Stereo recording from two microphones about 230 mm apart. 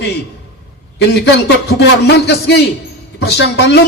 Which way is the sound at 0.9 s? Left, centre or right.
Left.